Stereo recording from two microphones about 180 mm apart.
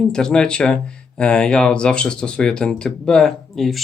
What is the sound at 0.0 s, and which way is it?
Speech, 5° left (ahead or behind).